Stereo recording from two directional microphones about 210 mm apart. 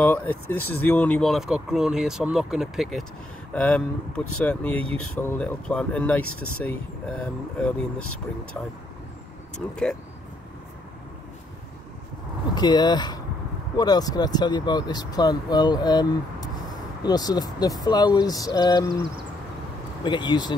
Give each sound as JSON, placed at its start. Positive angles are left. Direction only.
{"t": 0.0, "sound": "speech", "side_deg": 5}
{"t": 9.6, "sound": "speech", "side_deg": 0}
{"t": 12.5, "sound": "speech", "side_deg": 20}
{"t": 20.0, "sound": "speech", "side_deg": 20}